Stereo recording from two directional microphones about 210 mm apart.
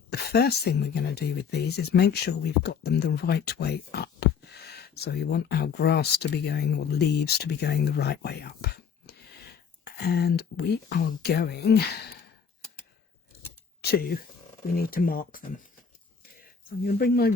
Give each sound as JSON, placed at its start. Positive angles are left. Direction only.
{"t": 0.1, "sound": "speech", "side_deg": 50}
{"t": 13.8, "sound": "speech", "side_deg": 45}